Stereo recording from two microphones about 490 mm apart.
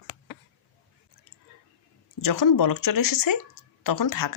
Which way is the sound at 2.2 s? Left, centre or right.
Left.